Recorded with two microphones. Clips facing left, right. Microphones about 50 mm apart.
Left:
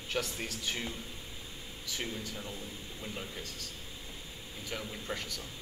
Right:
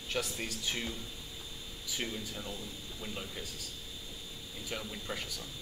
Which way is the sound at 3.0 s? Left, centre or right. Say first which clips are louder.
Even; centre.